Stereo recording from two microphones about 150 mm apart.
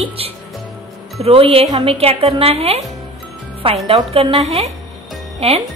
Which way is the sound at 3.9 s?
40° right (ahead or behind).